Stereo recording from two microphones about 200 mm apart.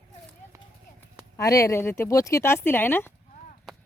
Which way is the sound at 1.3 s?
15° left (ahead or behind).